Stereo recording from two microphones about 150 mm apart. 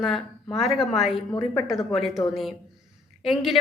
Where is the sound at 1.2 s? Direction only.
35° left (ahead or behind).